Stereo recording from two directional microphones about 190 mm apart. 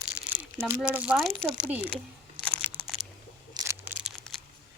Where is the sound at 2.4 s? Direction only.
5° right (ahead or behind).